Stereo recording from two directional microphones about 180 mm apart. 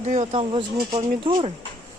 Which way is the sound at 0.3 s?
30° right (ahead or behind).